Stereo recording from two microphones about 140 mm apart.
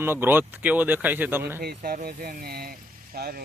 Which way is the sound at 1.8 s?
85° right.